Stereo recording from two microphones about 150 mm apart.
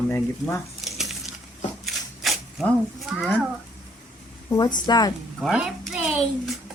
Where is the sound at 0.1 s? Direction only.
15° left (ahead or behind).